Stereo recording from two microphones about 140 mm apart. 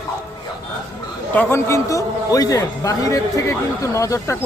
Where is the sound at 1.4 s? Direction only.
15° left (ahead or behind).